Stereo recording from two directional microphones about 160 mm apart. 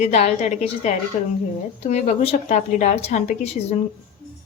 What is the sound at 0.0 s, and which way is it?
Speech, 45° left (ahead or behind).